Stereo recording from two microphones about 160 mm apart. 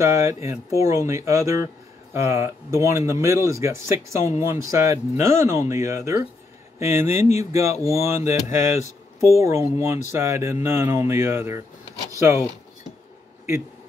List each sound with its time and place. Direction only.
0.0 s speech: 20° right (ahead or behind)
7.1 s speech: 45° left (ahead or behind)
7.8 s speech: 20° right (ahead or behind)